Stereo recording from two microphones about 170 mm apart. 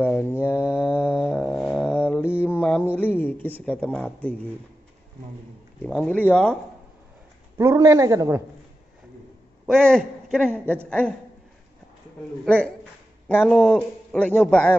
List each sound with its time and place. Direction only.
0.4 s mantra: 15° left (ahead or behind)
3.0 s a man's voice: 10° left (ahead or behind)
5.9 s a man's voice: 5° left (ahead or behind)
7.5 s speech: 20° right (ahead or behind)
9.7 s a man's voice: 5° left (ahead or behind)
12.4 s a man's voice: 5° left (ahead or behind)